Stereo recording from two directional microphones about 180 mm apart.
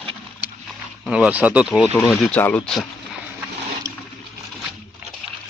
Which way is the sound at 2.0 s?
5° left (ahead or behind).